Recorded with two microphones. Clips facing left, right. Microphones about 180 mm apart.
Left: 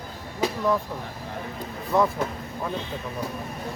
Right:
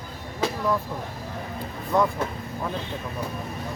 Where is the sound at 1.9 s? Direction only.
Centre (ahead or behind).